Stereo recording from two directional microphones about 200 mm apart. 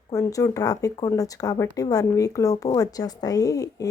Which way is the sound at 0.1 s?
15° left (ahead or behind).